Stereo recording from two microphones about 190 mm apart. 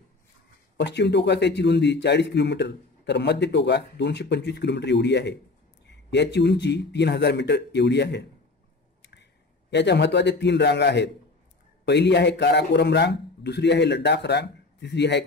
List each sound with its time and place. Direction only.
0.7 s a man's voice: 65° left (ahead or behind)
9.7 s a man's voice: 65° left (ahead or behind)